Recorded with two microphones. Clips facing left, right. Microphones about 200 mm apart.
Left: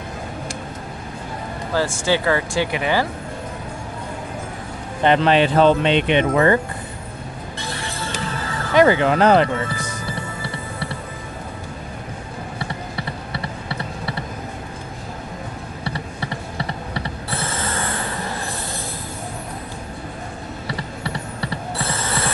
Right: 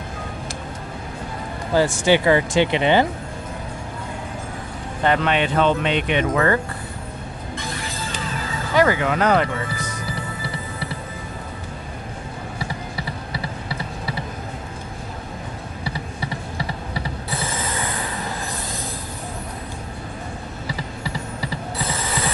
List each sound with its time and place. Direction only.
1.7 s speech: 15° right (ahead or behind)
5.0 s speech: 30° left (ahead or behind)
8.7 s speech: 25° left (ahead or behind)